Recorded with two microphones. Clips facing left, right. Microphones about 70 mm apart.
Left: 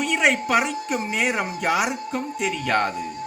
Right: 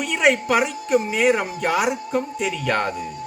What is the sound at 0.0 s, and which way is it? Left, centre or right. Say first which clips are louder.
Speech: right 2 dB; centre.